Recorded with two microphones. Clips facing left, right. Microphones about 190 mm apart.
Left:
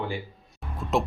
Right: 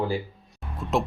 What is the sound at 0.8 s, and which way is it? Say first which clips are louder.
Speech: even; centre (ahead or behind).